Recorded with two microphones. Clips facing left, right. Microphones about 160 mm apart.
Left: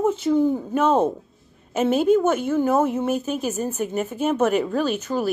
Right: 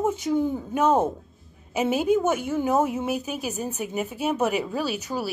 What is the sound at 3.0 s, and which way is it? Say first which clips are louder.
A woman's voice: left 4 dB; 10° right (ahead or behind).